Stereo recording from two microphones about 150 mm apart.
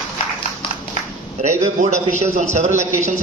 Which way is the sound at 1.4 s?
50° right (ahead or behind).